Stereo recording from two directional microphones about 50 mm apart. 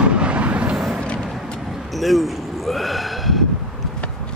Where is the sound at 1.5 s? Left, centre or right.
Centre.